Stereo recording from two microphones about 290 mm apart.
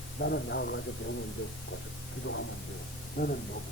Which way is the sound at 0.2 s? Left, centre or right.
Left.